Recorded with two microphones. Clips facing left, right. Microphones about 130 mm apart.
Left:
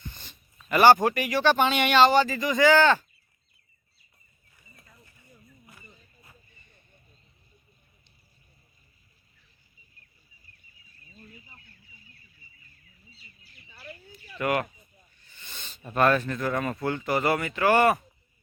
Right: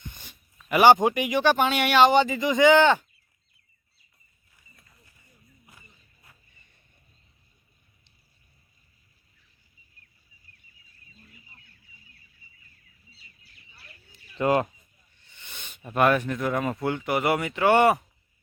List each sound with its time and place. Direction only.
0.0 s speech: 15° right (ahead or behind)
14.1 s bird: 25° right (ahead or behind)
15.3 s speech: 15° right (ahead or behind)